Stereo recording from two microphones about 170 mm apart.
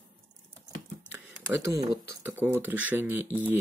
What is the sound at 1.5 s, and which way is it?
Speech, 15° right (ahead or behind).